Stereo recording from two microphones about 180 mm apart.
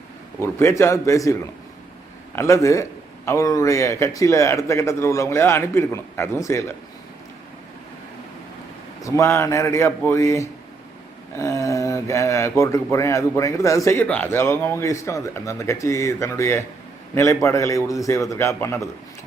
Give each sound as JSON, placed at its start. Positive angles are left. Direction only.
{"t": 0.3, "sound": "speech", "side_deg": 15}
{"t": 9.0, "sound": "speech", "side_deg": 15}